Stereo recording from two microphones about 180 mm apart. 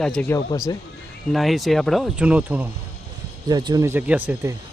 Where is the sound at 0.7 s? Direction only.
20° left (ahead or behind).